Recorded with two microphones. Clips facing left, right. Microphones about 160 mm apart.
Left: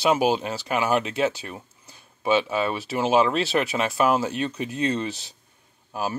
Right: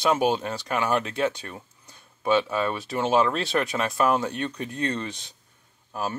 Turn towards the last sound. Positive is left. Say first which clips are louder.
# left 2 dB
turn(degrees=5)  # may be behind; listen again after turning